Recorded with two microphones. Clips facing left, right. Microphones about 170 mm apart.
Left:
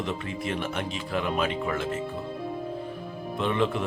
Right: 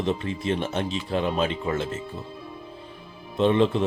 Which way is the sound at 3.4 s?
30° right (ahead or behind).